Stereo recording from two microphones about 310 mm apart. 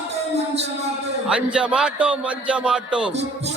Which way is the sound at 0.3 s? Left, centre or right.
Centre.